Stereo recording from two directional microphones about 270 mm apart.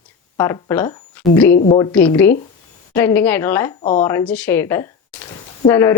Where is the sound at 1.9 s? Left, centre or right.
Centre.